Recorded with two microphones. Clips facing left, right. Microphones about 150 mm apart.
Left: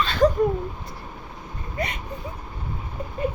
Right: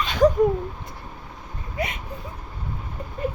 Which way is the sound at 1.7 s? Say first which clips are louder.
Right 1 dB; 5° right (ahead or behind).